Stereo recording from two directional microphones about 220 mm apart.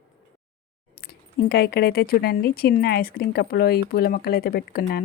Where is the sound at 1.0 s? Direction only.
45° left (ahead or behind).